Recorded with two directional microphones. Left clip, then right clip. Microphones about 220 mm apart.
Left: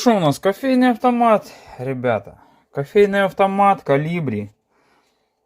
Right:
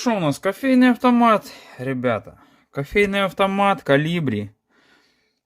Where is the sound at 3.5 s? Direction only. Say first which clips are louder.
Left 5 dB; 20° right (ahead or behind).